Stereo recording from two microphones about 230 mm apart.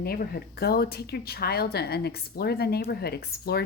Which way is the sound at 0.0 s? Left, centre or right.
Left.